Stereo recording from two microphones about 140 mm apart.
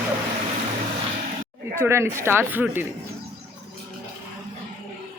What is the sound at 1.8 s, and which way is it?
Speech, 20° right (ahead or behind).